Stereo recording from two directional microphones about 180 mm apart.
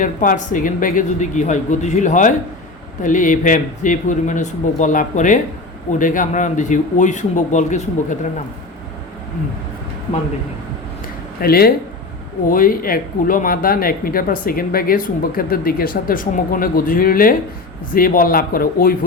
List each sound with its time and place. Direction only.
0.0 s speech: 45° left (ahead or behind)
11.3 s speech: 55° left (ahead or behind)